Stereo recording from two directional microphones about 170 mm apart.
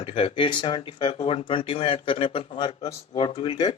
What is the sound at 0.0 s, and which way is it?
Speech, 35° left (ahead or behind).